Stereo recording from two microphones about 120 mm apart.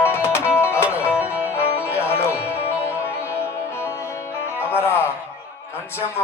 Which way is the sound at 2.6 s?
20° left (ahead or behind).